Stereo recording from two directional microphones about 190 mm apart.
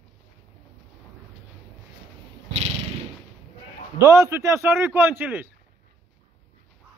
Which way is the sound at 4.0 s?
15° right (ahead or behind).